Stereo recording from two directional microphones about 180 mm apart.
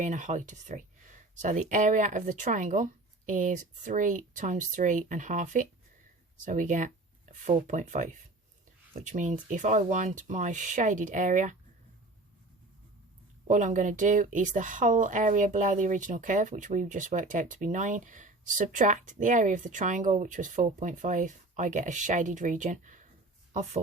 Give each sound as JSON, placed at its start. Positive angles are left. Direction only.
{"t": 0.0, "sound": "speech", "side_deg": -40}
{"t": 13.5, "sound": "speech", "side_deg": -45}